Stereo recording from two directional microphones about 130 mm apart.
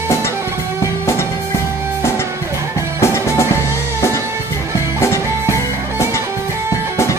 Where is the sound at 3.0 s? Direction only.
20° left (ahead or behind).